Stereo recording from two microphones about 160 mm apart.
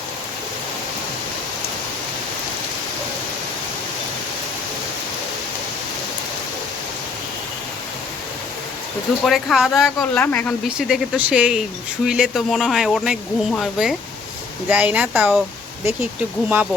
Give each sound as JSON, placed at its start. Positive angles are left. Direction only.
{"t": 9.2, "sound": "speech", "side_deg": 0}
{"t": 10.2, "sound": "speech", "side_deg": 10}
{"t": 10.8, "sound": "speech", "side_deg": -5}